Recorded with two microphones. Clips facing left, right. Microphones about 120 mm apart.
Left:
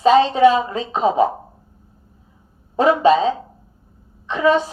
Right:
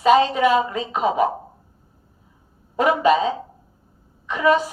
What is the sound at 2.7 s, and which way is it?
A woman's voice, 30° left (ahead or behind).